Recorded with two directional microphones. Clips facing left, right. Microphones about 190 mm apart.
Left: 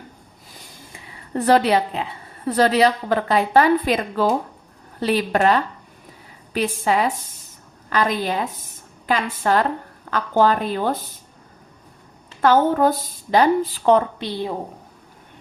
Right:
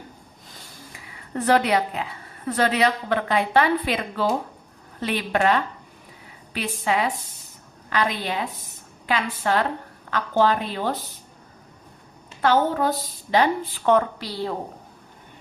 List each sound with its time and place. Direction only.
0.9 s a woman's voice: 35° left (ahead or behind)
12.4 s a woman's voice: 50° left (ahead or behind); by 14.5 s 20° left (ahead or behind)